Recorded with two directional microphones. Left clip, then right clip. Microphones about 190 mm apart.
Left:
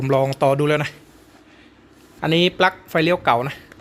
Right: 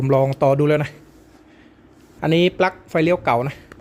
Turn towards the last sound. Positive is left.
turn(degrees=-10)  # may be behind; listen again after turning